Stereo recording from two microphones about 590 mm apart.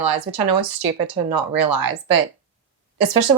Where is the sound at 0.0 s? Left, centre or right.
Right.